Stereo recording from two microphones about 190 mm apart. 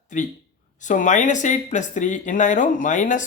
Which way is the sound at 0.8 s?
40° left (ahead or behind).